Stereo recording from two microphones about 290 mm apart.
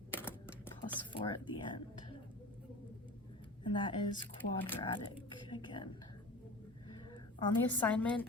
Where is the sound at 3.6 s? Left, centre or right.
Centre.